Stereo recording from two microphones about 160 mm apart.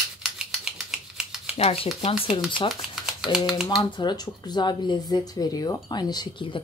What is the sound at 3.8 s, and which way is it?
Speech, 25° left (ahead or behind).